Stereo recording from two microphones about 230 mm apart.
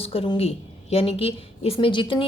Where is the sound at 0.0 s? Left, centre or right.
Left.